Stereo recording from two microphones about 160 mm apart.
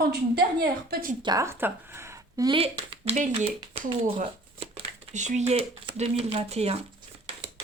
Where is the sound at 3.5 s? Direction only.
35° right (ahead or behind).